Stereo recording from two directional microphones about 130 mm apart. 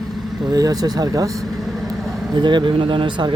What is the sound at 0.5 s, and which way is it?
Speech, 30° right (ahead or behind).